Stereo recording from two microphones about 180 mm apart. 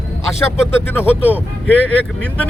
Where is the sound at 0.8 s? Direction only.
10° left (ahead or behind).